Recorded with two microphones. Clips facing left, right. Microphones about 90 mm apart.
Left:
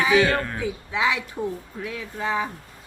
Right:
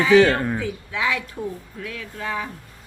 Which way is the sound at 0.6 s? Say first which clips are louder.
Left 1 dB; 20° left (ahead or behind).